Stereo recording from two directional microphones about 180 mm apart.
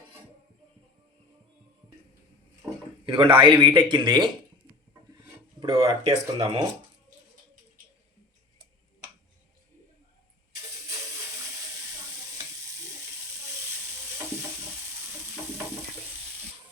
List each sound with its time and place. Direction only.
3.1 s speech: 30° right (ahead or behind)
5.5 s speech: 25° right (ahead or behind)